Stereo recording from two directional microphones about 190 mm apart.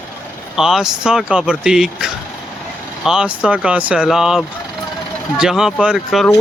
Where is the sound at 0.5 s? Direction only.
Centre (ahead or behind).